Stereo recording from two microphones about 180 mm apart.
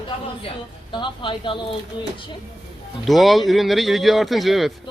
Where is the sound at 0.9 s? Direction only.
25° left (ahead or behind).